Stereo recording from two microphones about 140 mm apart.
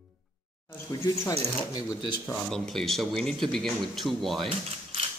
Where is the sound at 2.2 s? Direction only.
5° left (ahead or behind).